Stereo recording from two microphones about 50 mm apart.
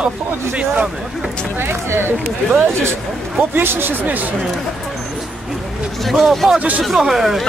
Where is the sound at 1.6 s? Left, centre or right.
Right.